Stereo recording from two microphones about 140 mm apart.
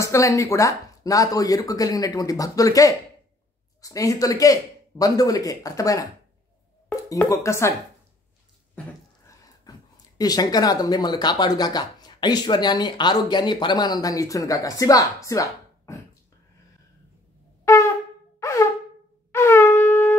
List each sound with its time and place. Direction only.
0.0 s speech: 20° left (ahead or behind)
7.1 s speech: 25° left (ahead or behind)
9.7 s speech: 25° left (ahead or behind)
15.2 s a sound: 25° left (ahead or behind)
17.6 s shofar: 20° left (ahead or behind)
19.3 s shofar: 20° left (ahead or behind)